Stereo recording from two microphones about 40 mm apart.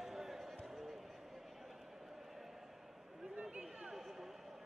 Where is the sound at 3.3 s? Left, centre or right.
Right.